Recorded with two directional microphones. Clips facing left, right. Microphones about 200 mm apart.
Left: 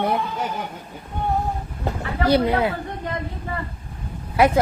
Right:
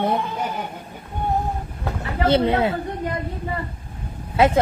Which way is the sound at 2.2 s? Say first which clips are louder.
Even; 25° right (ahead or behind).